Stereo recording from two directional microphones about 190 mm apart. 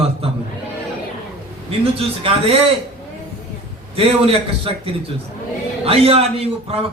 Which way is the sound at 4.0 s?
30° right (ahead or behind).